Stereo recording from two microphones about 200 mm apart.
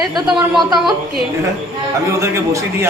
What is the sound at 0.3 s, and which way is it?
Speech, 20° right (ahead or behind).